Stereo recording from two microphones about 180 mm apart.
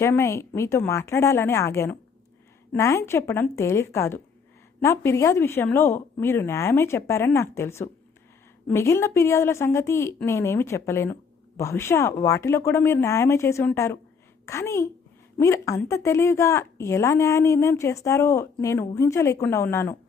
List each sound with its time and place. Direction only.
0.0 s a woman's voice: 15° left (ahead or behind)